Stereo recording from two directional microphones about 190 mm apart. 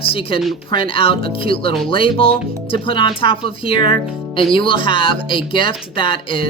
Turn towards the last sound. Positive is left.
turn(degrees=25)  # may be behind; listen again after turning